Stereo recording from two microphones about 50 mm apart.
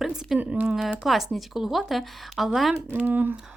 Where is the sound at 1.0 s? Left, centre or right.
Centre.